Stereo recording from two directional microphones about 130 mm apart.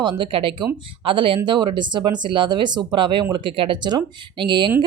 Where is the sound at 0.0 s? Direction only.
40° right (ahead or behind).